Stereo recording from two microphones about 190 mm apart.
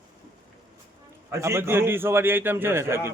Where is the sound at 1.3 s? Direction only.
15° right (ahead or behind).